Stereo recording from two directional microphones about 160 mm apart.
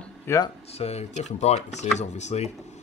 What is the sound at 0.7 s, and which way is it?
Speech, 40° left (ahead or behind).